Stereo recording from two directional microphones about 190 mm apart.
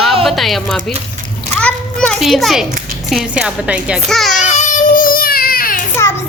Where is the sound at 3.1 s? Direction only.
Centre (ahead or behind).